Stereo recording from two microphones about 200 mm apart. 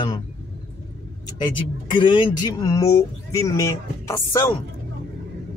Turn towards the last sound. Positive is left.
turn(degrees=15)  # may be behind; listen again after turning